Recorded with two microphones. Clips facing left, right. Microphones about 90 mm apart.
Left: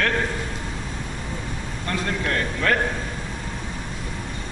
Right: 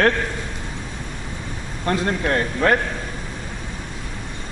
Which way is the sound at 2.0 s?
30° right (ahead or behind).